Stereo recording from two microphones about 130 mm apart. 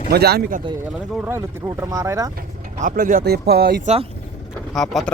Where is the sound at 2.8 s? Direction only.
90° right.